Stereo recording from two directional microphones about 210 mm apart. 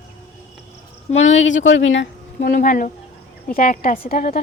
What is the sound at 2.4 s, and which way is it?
A woman's voice, 40° left (ahead or behind).